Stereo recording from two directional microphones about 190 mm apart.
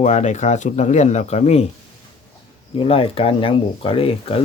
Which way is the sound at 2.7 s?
30° left (ahead or behind).